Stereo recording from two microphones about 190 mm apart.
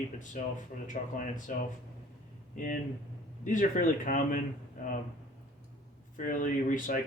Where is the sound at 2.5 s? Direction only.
45° left (ahead or behind).